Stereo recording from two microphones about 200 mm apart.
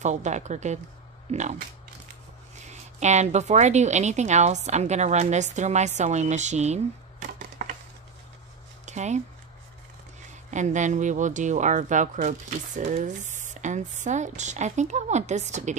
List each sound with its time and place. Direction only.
0.0 s speech: 35° right (ahead or behind)
2.6 s a woman's voice: 35° right (ahead or behind)
8.8 s speech: 35° right (ahead or behind)
10.5 s speech: 35° right (ahead or behind)